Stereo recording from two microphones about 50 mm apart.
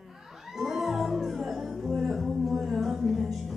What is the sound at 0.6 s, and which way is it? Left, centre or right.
Music, centre.